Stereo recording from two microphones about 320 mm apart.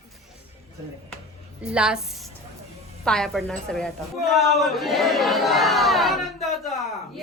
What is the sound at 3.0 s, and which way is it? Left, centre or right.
A woman's voice, centre.